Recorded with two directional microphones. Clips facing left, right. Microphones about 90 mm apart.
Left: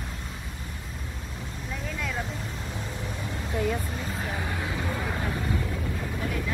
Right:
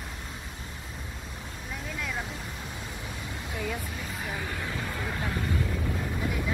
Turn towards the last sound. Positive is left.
turn(degrees=15)  # may be behind; listen again after turning